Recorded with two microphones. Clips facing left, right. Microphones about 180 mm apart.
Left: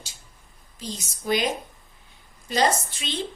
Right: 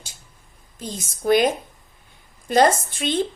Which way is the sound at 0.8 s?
50° right (ahead or behind).